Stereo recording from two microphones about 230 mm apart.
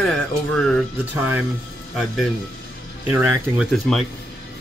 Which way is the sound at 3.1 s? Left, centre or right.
Centre.